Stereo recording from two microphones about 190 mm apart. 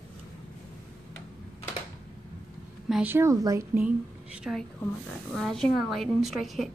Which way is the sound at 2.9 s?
10° right (ahead or behind).